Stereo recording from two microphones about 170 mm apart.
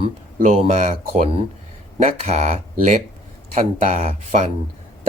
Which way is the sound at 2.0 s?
40° right (ahead or behind).